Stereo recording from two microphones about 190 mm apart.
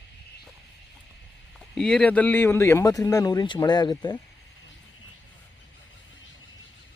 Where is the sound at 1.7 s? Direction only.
5° left (ahead or behind); by 4.2 s 20° left (ahead or behind).